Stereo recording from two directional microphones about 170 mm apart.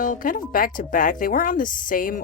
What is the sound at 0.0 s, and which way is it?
A woman's voice, 55° left (ahead or behind).